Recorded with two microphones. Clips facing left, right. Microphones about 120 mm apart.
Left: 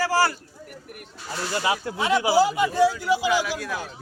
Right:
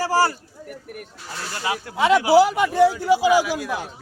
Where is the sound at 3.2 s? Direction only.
10° right (ahead or behind).